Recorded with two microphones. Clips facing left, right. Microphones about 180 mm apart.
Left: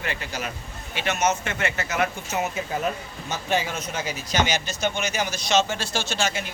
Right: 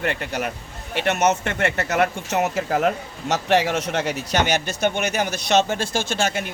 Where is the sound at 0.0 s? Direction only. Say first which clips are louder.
Right 6 dB; 60° right (ahead or behind).